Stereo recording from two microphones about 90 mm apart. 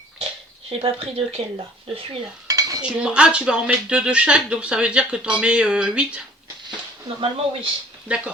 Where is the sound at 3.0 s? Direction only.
10° right (ahead or behind).